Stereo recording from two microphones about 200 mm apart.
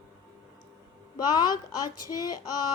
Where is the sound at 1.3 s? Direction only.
20° left (ahead or behind).